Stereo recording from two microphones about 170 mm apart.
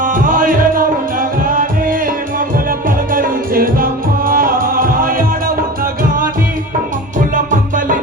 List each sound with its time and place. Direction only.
0.0 s music: 55° right (ahead or behind)
7.3 s music: 50° right (ahead or behind)